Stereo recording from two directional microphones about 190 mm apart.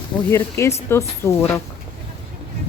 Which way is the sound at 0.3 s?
15° left (ahead or behind).